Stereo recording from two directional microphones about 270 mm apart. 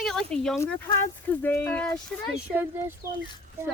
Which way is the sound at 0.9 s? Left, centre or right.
Centre.